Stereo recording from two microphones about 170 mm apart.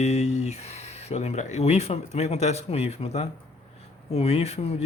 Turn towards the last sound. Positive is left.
turn(degrees=40)  # may be behind; listen again after turning